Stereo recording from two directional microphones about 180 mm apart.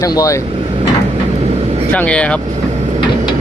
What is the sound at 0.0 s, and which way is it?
Speech, 20° left (ahead or behind).